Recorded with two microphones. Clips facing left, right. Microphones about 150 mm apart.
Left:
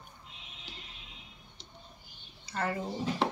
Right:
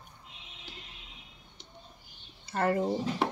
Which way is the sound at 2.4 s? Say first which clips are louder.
Right 6 dB; 50° right (ahead or behind).